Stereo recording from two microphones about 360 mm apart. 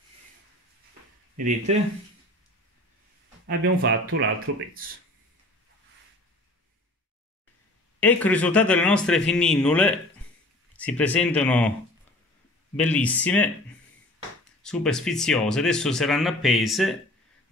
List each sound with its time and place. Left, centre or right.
3.4 s speech: right
8.0 s speech: centre
12.7 s speech: centre
14.6 s speech: centre